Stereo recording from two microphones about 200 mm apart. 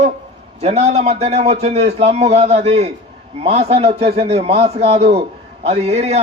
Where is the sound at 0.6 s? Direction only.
30° right (ahead or behind).